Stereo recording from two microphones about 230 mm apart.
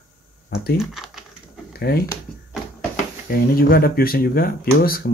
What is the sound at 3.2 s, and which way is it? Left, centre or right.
Speech, left.